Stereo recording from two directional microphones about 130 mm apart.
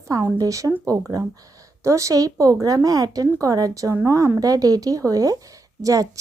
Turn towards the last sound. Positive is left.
turn(degrees=-25)  # may be behind; listen again after turning